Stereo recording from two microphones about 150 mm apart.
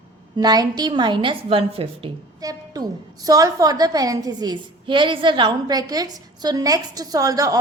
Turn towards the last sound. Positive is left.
turn(degrees=-25)  # may be behind; listen again after turning